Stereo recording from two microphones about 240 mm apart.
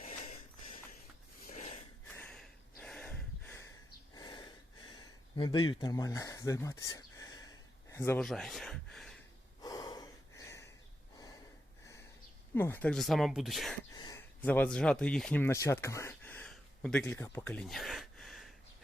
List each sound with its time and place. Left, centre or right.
0.0 s a sound: left
2.1 s a sound: centre
5.4 s speech: centre
9.6 s gasp: centre
12.5 s speech: centre
13.9 s speech: centre